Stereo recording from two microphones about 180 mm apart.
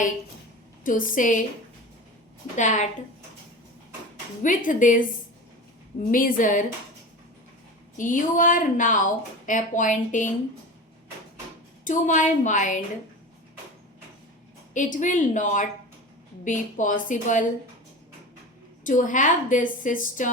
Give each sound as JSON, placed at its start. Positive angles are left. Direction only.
{"t": 0.9, "sound": "a woman's voice", "side_deg": 50}
{"t": 2.6, "sound": "a woman's voice", "side_deg": 45}
{"t": 4.4, "sound": "a woman's voice", "side_deg": 50}
{"t": 6.1, "sound": "a woman's voice", "side_deg": 50}
{"t": 7.9, "sound": "a woman's voice", "side_deg": 45}
{"t": 11.9, "sound": "a woman's voice", "side_deg": 45}
{"t": 14.7, "sound": "a woman's voice", "side_deg": 45}
{"t": 18.9, "sound": "a woman's voice", "side_deg": 45}